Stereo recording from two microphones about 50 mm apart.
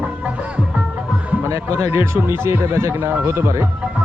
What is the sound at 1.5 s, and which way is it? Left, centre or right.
Speech, right.